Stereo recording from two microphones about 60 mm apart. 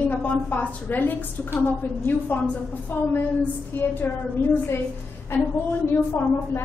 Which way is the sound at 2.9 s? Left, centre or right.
Left.